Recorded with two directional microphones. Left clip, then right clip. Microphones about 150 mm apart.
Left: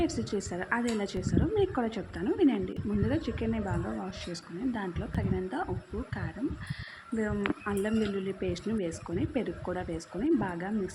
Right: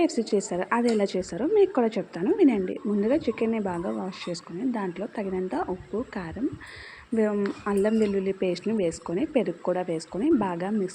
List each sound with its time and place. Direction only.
0.0 s a woman's voice: 25° right (ahead or behind)
7.2 s a woman's voice: 30° right (ahead or behind)